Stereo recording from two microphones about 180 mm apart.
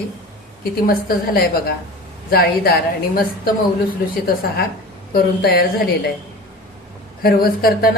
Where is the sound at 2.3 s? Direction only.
55° left (ahead or behind).